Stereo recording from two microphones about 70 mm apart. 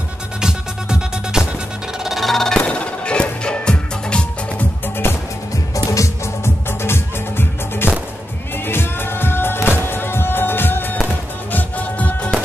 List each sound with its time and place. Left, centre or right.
0.4 s music: centre
2.0 s music: centre
5.9 s music: left